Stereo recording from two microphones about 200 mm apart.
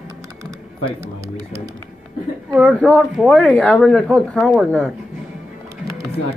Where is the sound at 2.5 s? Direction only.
5° right (ahead or behind).